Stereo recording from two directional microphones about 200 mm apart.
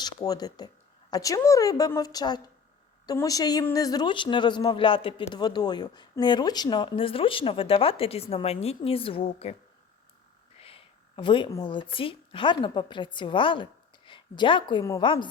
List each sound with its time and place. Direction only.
0.0 s a woman's voice: 20° left (ahead or behind)
10.6 s speech: 30° left (ahead or behind)